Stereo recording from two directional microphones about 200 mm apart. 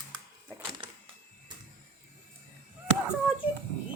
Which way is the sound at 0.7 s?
25° right (ahead or behind).